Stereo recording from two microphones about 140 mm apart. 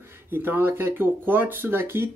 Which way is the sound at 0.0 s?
15° right (ahead or behind).